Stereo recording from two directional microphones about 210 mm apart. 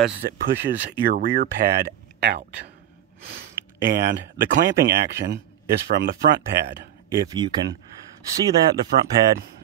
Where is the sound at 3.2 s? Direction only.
45° right (ahead or behind).